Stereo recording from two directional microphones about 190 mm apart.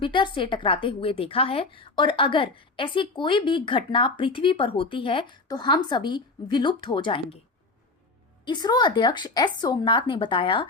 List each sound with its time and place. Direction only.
0.0 s a woman's voice: 25° left (ahead or behind)
8.4 s a woman's voice: 20° left (ahead or behind)